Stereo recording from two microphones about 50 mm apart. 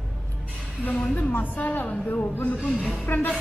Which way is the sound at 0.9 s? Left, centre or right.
Left.